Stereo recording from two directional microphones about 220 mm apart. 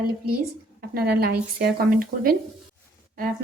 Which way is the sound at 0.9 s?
45° right (ahead or behind).